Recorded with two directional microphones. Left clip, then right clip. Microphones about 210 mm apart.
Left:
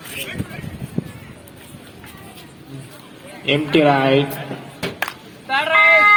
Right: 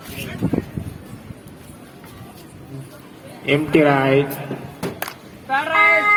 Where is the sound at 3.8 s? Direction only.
5° right (ahead or behind).